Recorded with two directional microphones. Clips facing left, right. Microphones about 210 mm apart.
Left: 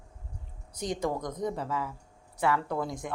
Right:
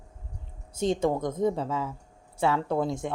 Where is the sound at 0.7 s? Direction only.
25° right (ahead or behind).